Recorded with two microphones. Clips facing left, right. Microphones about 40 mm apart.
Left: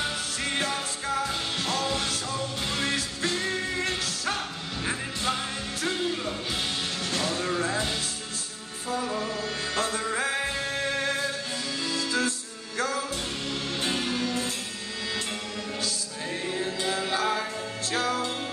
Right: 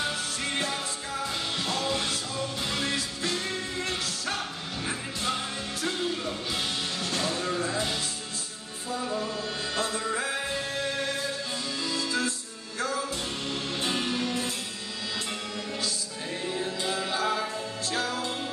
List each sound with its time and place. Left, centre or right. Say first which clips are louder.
0.4 s music: left 3 dB; left
7.1 s music: left 1 dB; left
8.9 s music: left 1 dB; left
16.5 s music: left 1 dB; left